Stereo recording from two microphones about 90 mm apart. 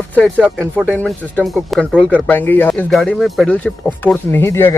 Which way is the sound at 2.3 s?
20° left (ahead or behind).